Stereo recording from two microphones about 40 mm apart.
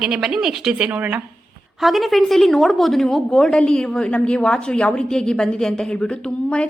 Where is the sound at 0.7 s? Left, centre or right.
Right.